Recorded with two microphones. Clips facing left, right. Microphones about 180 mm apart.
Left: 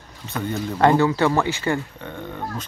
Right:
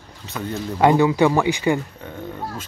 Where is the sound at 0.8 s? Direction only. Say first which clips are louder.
Right 2 dB; 15° right (ahead or behind).